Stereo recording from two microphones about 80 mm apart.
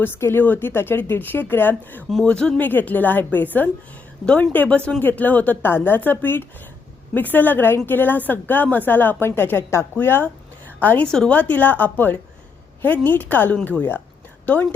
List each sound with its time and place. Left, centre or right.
0.0 s a woman's voice: left
2.2 s speech: centre
2.6 s a woman's voice: left
11.1 s speech: centre
11.3 s a woman's voice: left